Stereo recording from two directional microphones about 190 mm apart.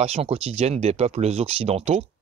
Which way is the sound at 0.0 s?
30° right (ahead or behind).